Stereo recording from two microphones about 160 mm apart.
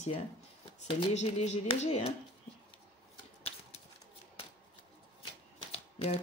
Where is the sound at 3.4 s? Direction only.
40° left (ahead or behind).